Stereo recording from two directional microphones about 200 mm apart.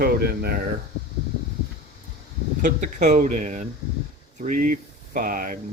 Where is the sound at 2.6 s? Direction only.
40° right (ahead or behind).